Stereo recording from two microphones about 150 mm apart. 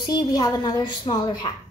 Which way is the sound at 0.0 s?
30° left (ahead or behind).